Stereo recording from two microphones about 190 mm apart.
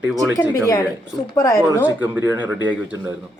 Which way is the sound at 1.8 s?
10° right (ahead or behind).